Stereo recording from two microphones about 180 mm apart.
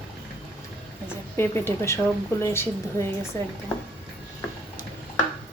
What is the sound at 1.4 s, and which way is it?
A woman's voice, 15° left (ahead or behind).